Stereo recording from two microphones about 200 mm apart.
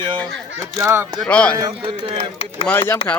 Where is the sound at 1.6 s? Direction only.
25° right (ahead or behind).